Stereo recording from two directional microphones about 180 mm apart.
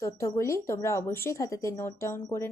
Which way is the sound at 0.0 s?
15° left (ahead or behind).